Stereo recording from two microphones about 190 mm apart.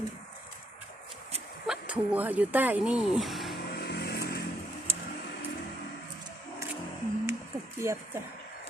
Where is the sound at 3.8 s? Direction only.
55° left (ahead or behind).